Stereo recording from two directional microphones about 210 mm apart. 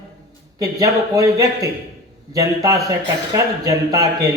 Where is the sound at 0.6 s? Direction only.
15° right (ahead or behind).